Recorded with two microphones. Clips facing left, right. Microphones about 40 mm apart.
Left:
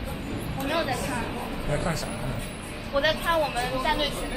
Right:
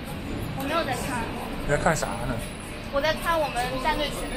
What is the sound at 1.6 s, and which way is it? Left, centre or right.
Speech, right.